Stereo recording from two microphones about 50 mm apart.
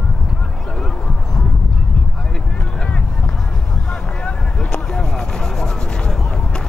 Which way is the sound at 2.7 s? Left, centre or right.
Centre.